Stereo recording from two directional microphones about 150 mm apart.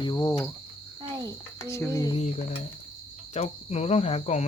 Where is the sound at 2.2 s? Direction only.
50° left (ahead or behind).